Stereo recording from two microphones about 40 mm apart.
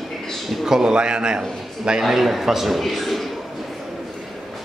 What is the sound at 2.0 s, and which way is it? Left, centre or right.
A man's voice, centre.